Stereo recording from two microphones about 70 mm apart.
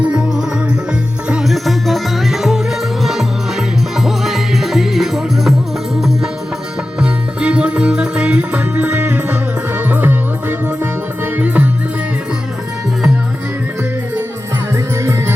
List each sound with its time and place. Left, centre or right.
1.5 s music: centre
7.0 s music: centre
11.3 s music: right